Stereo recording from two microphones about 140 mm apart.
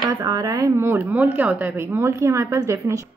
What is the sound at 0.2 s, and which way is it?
A woman's voice, 25° right (ahead or behind).